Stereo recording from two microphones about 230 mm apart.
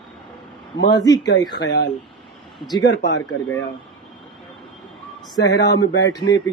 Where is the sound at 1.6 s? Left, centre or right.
Left.